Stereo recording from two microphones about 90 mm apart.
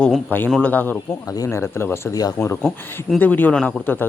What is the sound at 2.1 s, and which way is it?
Speech, 45° left (ahead or behind).